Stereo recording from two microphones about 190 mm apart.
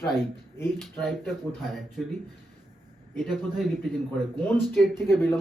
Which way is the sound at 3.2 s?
Centre (ahead or behind).